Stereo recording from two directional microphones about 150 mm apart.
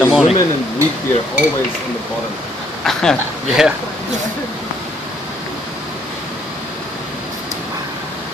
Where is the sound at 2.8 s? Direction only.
5° left (ahead or behind).